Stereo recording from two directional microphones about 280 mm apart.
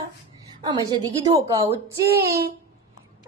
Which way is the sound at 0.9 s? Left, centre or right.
Centre.